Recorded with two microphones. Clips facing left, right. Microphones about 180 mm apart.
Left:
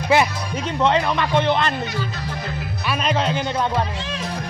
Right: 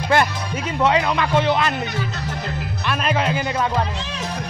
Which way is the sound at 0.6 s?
5° right (ahead or behind).